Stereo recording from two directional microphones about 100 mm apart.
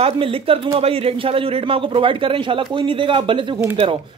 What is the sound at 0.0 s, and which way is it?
A man's voice, 65° right (ahead or behind).